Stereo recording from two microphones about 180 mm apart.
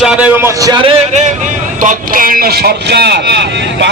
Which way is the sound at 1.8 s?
50° right (ahead or behind).